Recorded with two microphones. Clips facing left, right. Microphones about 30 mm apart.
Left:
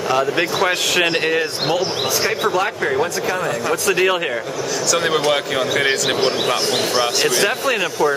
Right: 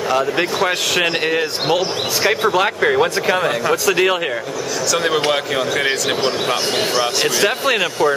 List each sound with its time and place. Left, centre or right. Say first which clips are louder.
0.1 s a man's voice: even; centre
1.7 s speech: right 2 dB; centre
2.6 s speech: right 4 dB; right
3.9 s a man's voice: right 1 dB; centre
7.6 s speech: right 1 dB; right